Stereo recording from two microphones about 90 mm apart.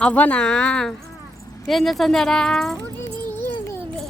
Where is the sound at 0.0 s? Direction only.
15° left (ahead or behind).